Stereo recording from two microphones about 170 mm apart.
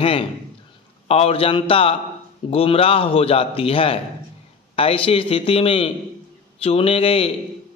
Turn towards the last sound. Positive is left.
turn(degrees=35)  # may be behind; listen again after turning